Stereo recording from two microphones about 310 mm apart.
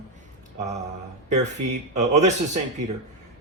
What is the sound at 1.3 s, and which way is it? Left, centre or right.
Speech, right.